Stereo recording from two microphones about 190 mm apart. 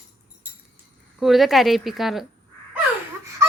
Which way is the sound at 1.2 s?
Centre (ahead or behind).